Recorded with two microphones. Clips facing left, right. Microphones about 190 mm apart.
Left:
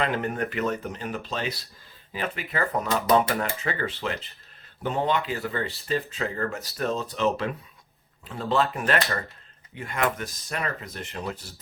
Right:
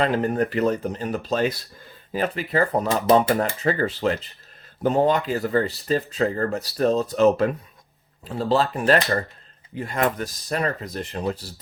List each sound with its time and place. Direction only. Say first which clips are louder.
0.0 s speech: right 5 dB; 35° right (ahead or behind)